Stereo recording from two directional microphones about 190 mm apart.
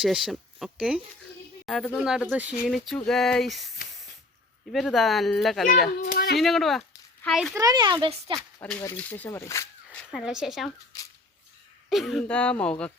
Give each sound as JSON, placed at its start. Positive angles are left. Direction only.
{"t": 0.0, "sound": "speech", "side_deg": 0}
{"t": 4.7, "sound": "speech", "side_deg": 0}
{"t": 6.1, "sound": "a sound", "side_deg": 55}
{"t": 6.4, "sound": "speech", "side_deg": 0}
{"t": 7.5, "sound": "speech", "side_deg": -20}
{"t": 8.8, "sound": "speech", "side_deg": 10}
{"t": 11.9, "sound": "speech", "side_deg": 0}